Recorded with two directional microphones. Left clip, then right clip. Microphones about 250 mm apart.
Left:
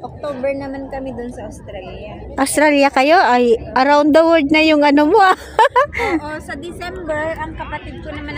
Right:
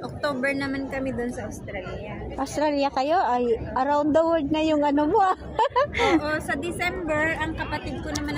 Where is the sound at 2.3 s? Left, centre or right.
Left.